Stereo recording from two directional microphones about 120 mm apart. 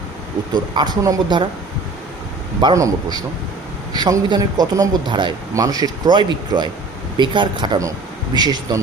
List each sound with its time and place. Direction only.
0.5 s a man's voice: 35° right (ahead or behind)
2.7 s a man's voice: 30° right (ahead or behind)